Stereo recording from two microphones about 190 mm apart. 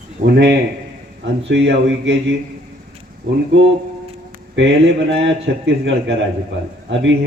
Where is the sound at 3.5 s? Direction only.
75° right (ahead or behind).